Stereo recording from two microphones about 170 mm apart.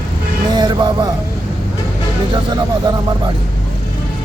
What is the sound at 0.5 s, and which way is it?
Music, 25° right (ahead or behind).